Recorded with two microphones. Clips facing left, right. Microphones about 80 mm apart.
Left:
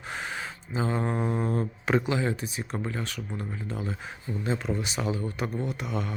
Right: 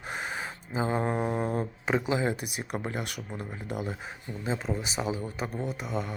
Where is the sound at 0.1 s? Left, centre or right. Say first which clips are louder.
Even; centre.